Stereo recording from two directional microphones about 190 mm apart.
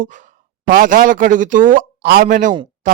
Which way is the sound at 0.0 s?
40° right (ahead or behind).